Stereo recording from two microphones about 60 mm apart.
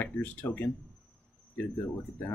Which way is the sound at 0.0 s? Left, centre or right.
Left.